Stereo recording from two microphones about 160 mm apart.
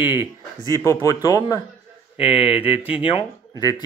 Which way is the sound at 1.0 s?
20° left (ahead or behind).